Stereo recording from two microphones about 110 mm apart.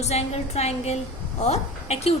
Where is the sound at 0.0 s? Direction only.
75° left (ahead or behind).